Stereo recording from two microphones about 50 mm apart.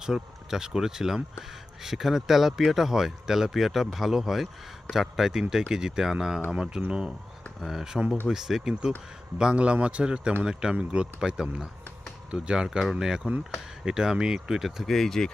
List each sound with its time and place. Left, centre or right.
0.0 s speech: centre
7.6 s speech: centre
9.4 s a man's voice: right
14.8 s speech: centre